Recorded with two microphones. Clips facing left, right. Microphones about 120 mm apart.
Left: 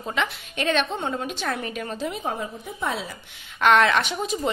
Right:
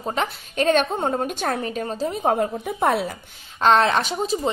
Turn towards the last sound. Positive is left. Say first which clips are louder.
# right 3 dB
turn(degrees=-30)  # may be behind; listen again after turning